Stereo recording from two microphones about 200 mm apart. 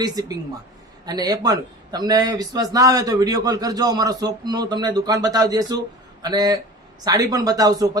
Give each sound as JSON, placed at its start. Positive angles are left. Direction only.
{"t": 0.0, "sound": "a man's voice", "side_deg": -20}